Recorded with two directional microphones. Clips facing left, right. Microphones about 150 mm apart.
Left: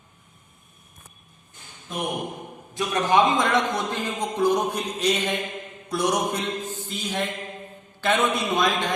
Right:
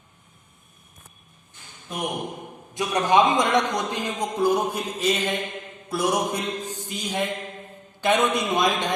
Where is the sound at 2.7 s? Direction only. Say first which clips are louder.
Right 1 dB; 20° right (ahead or behind).